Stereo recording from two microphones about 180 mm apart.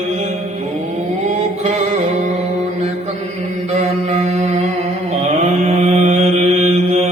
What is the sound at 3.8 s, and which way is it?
Mantra, 40° right (ahead or behind).